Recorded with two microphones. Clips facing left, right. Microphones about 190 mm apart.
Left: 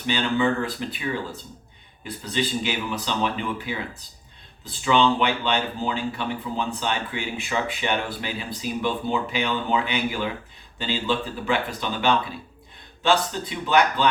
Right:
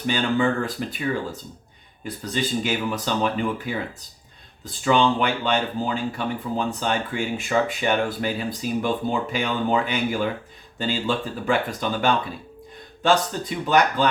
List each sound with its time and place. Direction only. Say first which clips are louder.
0.0 s speech: right 1 dB; 45° right (ahead or behind)
2.3 s speech: right 1 dB; 45° right (ahead or behind)